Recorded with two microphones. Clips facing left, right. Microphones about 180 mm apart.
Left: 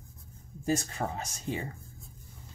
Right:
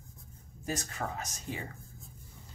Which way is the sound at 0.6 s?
30° left (ahead or behind).